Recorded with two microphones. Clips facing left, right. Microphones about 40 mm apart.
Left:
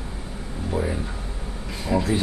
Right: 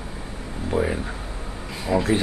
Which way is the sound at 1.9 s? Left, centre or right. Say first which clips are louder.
Right 1 dB; centre.